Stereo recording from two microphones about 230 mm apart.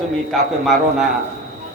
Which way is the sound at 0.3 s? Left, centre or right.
Centre.